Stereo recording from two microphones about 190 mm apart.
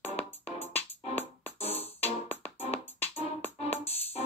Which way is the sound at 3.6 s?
30° left (ahead or behind).